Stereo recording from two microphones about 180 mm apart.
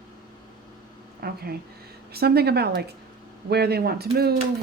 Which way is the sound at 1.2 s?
55° right (ahead or behind).